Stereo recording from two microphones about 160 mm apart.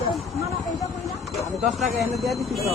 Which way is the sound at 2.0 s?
Centre (ahead or behind).